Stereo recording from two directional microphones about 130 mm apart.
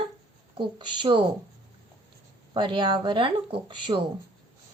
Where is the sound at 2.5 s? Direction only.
35° right (ahead or behind).